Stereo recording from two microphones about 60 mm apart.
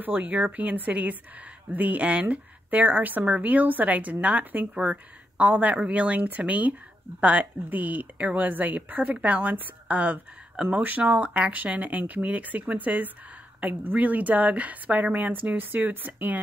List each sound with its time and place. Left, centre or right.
0.0 s speech: right